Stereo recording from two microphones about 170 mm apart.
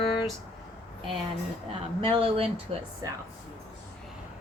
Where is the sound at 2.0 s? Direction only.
30° right (ahead or behind).